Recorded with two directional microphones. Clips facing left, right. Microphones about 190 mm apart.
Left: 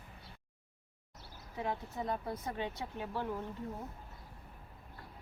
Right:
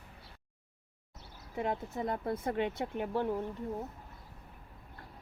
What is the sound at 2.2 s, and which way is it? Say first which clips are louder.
Speech: right 6 dB; 55° right (ahead or behind).